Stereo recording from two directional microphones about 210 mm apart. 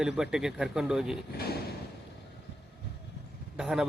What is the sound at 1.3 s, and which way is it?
Speech, 50° left (ahead or behind).